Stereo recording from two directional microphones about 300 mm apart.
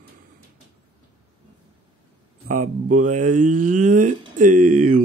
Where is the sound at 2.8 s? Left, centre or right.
Right.